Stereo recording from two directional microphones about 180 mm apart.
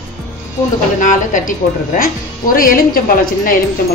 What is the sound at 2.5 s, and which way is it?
Speech, 55° left (ahead or behind).